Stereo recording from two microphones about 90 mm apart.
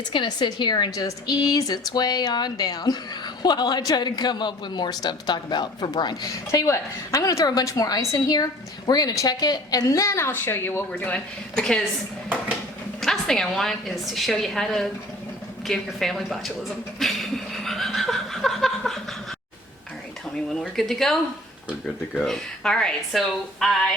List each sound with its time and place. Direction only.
0.1 s a woman's voice: 60° left (ahead or behind)
0.9 s a man's voice: 40° left (ahead or behind)
6.5 s speech: 35° left (ahead or behind); by 11.8 s 5° left (ahead or behind)
13.0 s a woman's voice: 5° left (ahead or behind)
17.0 s laughter: centre (ahead or behind)
20.5 s a woman's voice: 5° left (ahead or behind)
22.2 s a woman's voice: 5° left (ahead or behind)